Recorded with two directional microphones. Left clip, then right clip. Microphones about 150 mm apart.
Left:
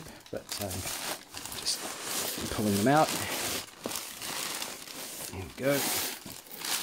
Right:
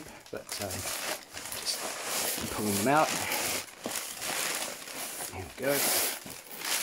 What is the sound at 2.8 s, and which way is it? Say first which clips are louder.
Speech: left 1 dB; 30° left (ahead or behind).